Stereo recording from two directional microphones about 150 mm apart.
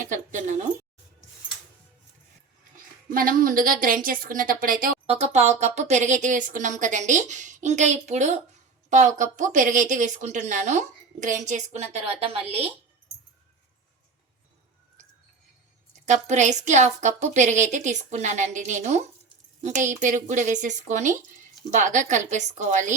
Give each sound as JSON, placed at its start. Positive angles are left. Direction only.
{"t": 0.0, "sound": "a woman's voice", "side_deg": -55}
{"t": 3.1, "sound": "a woman's voice", "side_deg": -70}
{"t": 5.0, "sound": "a woman's voice", "side_deg": -45}
{"t": 16.0, "sound": "a woman's voice", "side_deg": -50}